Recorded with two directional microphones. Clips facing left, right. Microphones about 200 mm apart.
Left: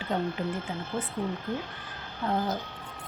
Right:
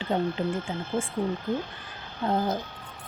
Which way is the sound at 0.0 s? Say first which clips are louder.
Right 3 dB; 25° right (ahead or behind).